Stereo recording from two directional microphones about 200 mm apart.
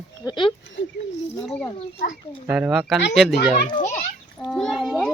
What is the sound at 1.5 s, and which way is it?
Speech, 5° left (ahead or behind).